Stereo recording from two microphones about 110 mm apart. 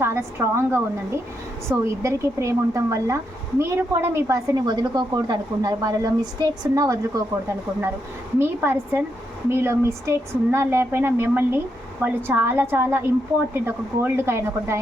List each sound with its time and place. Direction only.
0.0 s a woman's voice: 25° right (ahead or behind)
8.4 s speech: 20° right (ahead or behind)